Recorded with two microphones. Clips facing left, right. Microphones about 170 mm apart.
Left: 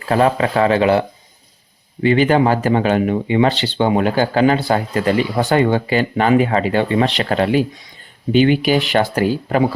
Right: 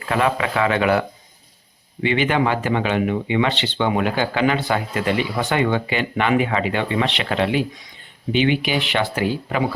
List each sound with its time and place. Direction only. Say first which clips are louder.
0.1 s speech: left 5 dB; 35° left (ahead or behind)
2.0 s speech: left 6 dB; 40° left (ahead or behind)